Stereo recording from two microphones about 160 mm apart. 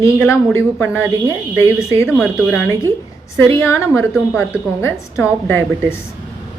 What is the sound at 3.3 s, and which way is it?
Speech, 15° left (ahead or behind).